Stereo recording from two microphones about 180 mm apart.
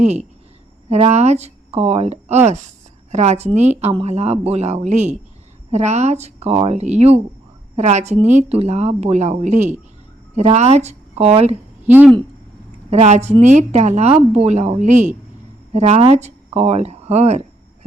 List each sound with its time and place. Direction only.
0.0 s speech: 40° right (ahead or behind)
11.9 s speech: 10° right (ahead or behind)
12.9 s speech: 40° right (ahead or behind)